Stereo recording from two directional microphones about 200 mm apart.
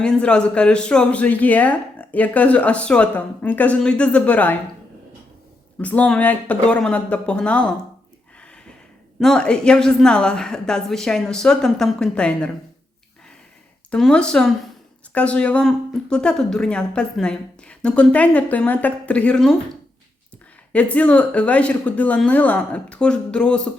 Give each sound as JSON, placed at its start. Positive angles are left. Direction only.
{"t": 0.0, "sound": "a man's voice", "side_deg": 5}
{"t": 5.8, "sound": "speech", "side_deg": 5}
{"t": 9.1, "sound": "speech", "side_deg": 0}
{"t": 13.9, "sound": "speech", "side_deg": 5}
{"t": 20.7, "sound": "a man's voice", "side_deg": 5}